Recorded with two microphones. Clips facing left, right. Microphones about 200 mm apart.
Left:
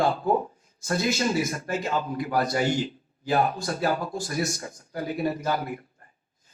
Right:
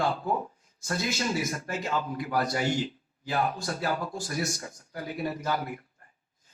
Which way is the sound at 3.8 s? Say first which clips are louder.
Left 5 dB; 35° left (ahead or behind).